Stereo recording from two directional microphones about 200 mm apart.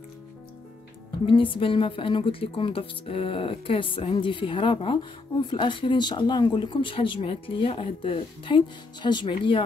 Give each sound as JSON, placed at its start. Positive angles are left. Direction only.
{"t": 1.2, "sound": "speech", "side_deg": 25}